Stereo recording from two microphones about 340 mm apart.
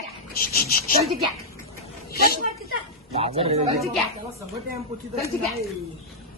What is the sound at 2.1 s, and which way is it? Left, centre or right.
Speech, left.